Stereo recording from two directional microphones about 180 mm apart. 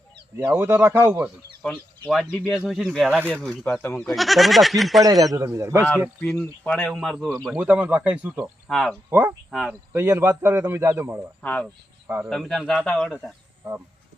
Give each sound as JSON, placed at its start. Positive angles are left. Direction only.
{"t": 0.5, "sound": "a man's voice", "side_deg": -10}
{"t": 1.6, "sound": "speech", "side_deg": 5}
{"t": 4.0, "sound": "speech", "side_deg": 0}
{"t": 5.2, "sound": "a man's voice", "side_deg": -20}
{"t": 6.2, "sound": "speech", "side_deg": 5}
{"t": 8.6, "sound": "speech", "side_deg": 5}
{"t": 9.0, "sound": "speech", "side_deg": -10}
{"t": 9.5, "sound": "speech", "side_deg": 0}
{"t": 9.9, "sound": "a man's voice", "side_deg": -15}
{"t": 11.4, "sound": "speech", "side_deg": 5}
{"t": 12.0, "sound": "speech", "side_deg": -10}